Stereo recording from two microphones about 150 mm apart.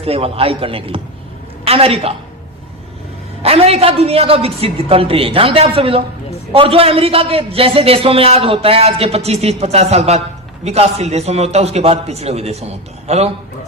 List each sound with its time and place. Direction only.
0.0 s a man's voice: 40° right (ahead or behind)
3.4 s a man's voice: 40° right (ahead or behind)